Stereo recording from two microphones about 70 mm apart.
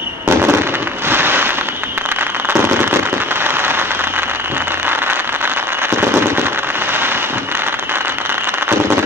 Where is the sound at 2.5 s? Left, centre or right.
Right.